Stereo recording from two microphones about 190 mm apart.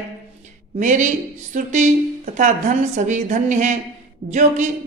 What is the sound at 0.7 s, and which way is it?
A woman's voice, 40° right (ahead or behind).